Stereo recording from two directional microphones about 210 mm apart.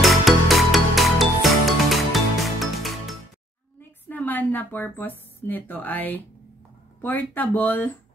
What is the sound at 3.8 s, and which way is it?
Speech, 10° left (ahead or behind).